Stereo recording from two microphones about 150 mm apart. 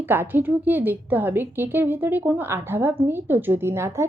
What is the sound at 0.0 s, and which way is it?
A woman's voice, 15° right (ahead or behind).